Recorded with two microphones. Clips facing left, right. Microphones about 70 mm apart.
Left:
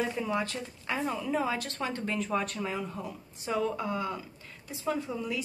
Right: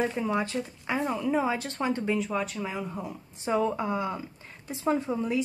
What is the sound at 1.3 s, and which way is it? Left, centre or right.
Speech, right.